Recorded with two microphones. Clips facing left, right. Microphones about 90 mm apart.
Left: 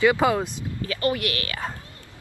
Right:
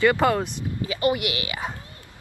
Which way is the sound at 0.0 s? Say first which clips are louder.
Even; 5° left (ahead or behind).